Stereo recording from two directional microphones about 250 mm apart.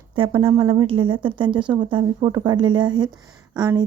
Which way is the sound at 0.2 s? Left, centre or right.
Right.